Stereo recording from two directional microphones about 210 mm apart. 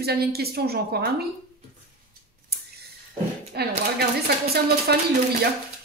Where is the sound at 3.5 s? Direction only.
50° right (ahead or behind).